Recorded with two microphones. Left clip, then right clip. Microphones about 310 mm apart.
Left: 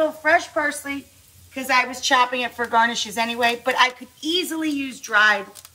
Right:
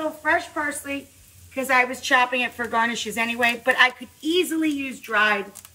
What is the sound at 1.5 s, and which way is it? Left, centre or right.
Stir, centre.